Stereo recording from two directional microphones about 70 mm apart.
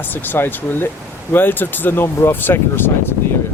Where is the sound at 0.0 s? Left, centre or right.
Left.